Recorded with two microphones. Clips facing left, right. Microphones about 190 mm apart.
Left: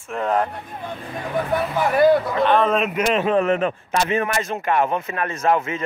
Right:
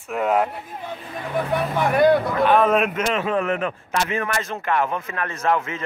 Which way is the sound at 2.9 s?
15° left (ahead or behind).